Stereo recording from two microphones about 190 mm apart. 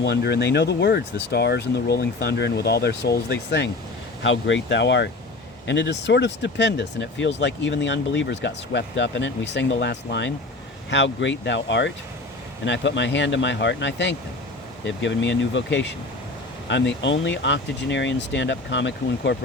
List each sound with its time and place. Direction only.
0.0 s speech: 60° left (ahead or behind)
4.2 s speech: 75° left (ahead or behind)